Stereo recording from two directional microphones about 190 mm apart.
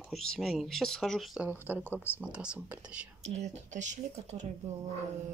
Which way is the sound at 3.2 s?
35° right (ahead or behind).